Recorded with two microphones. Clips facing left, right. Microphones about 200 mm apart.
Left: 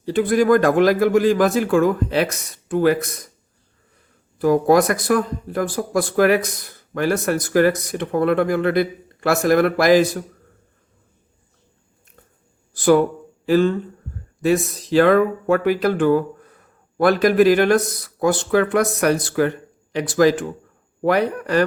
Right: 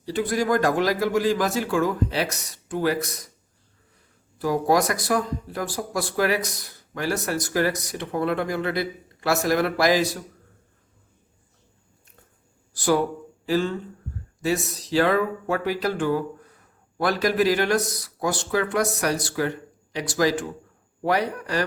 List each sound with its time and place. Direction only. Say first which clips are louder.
0.0 s a man's voice: left 7 dB; 55° left (ahead or behind)
4.4 s a man's voice: left 6 dB; 55° left (ahead or behind)
12.7 s speech: left 7 dB; 55° left (ahead or behind)